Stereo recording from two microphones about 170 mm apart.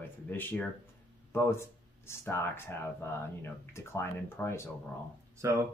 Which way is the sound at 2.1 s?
15° left (ahead or behind).